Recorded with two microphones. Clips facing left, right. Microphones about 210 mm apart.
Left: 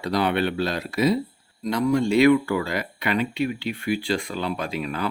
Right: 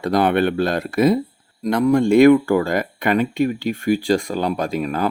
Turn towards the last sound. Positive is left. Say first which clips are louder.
# right 6 dB
turn(degrees=-45)  # may be behind; listen again after turning